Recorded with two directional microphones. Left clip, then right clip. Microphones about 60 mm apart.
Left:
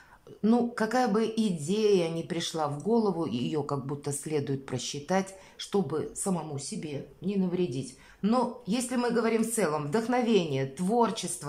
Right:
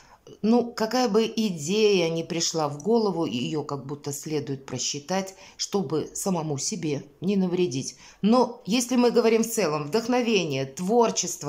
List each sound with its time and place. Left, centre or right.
0.4 s speech: right
0.7 s speech: centre; by 3.3 s right
3.3 s speech: centre
5.6 s speech: right
6.3 s speech: right
8.9 s speech: right
9.6 s speech: centre
10.9 s speech: right